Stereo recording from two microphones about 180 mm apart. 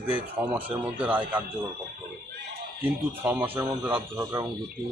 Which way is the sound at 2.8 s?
10° right (ahead or behind).